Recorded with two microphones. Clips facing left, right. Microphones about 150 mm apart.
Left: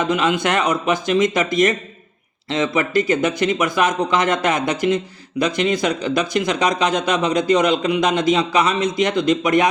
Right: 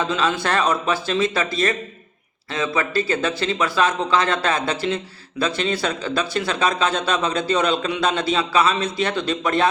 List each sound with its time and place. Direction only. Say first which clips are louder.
0.0 s speech: left 3 dB; 20° left (ahead or behind)